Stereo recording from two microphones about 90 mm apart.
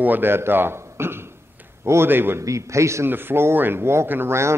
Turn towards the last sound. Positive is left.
turn(degrees=-30)  # may be behind; listen again after turning